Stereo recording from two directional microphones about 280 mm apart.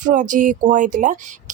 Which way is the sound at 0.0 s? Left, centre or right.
Right.